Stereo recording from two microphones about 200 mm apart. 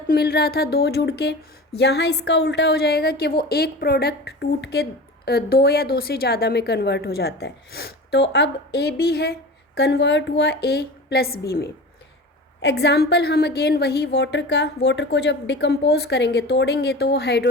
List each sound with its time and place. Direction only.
0.1 s a woman's voice: 50° left (ahead or behind)